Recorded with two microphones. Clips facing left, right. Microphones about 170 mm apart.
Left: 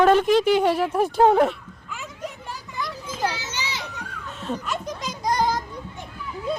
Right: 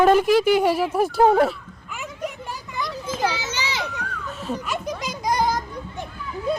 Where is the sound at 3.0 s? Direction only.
90° right.